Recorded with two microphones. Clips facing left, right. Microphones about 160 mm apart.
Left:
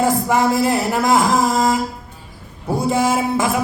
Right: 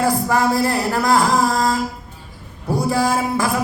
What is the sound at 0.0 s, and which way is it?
A man's voice, 20° left (ahead or behind).